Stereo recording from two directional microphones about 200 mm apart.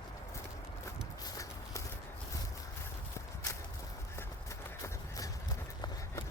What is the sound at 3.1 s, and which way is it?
Walk, 15° left (ahead or behind).